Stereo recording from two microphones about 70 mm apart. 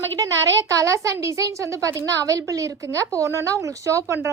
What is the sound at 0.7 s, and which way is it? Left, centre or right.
A woman's voice, right.